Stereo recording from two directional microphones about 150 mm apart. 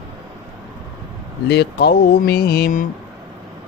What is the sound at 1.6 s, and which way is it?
Mantra, 90° left.